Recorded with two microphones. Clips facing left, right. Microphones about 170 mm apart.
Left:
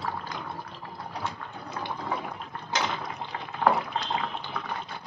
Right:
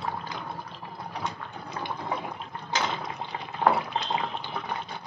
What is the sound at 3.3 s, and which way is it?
Water, 20° right (ahead or behind).